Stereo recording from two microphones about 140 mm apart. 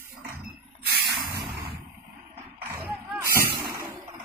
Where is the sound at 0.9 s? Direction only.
90° right.